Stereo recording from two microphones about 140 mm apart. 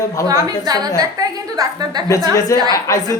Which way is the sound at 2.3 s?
25° left (ahead or behind).